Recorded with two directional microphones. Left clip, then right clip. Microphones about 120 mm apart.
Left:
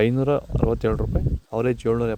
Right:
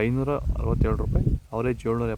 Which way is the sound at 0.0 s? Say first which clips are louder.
Left 5 dB; 30° left (ahead or behind).